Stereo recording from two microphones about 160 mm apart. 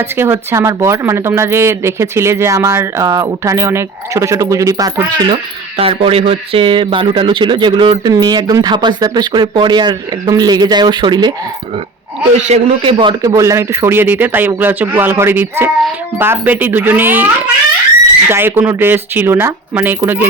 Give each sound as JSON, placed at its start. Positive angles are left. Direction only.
{"t": 0.0, "sound": "speech", "side_deg": -15}
{"t": 5.7, "sound": "speech", "side_deg": -40}
{"t": 12.4, "sound": "a man's voice", "side_deg": -45}
{"t": 13.2, "sound": "speech", "side_deg": -20}